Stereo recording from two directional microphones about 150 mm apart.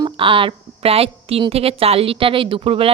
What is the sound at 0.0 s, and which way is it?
A woman's voice, 35° right (ahead or behind).